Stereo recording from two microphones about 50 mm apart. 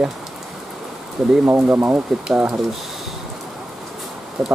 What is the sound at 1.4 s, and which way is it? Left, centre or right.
Speech, right.